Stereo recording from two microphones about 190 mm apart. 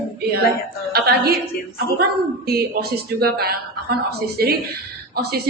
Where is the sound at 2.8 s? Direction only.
50° right (ahead or behind).